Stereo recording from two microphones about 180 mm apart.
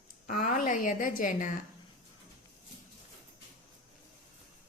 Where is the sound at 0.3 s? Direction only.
50° left (ahead or behind).